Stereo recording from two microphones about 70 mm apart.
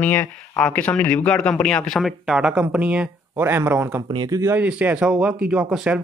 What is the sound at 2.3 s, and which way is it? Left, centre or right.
Speech, centre.